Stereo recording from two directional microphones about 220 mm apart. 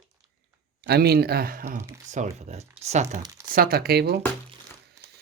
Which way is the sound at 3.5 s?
45° right (ahead or behind).